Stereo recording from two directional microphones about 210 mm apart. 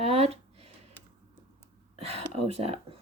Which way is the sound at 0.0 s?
30° right (ahead or behind).